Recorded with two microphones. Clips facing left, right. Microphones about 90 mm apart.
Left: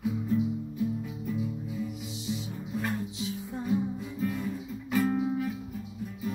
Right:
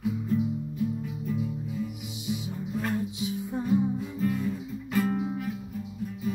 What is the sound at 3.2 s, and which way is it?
Music, 15° right (ahead or behind).